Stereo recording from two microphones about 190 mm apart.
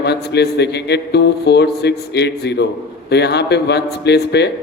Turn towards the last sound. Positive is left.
turn(degrees=60)  # may be behind; listen again after turning